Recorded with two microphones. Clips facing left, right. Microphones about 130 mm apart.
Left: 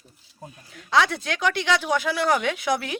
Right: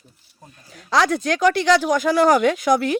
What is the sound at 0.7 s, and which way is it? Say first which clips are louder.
Speech: right 3 dB; 40° right (ahead or behind).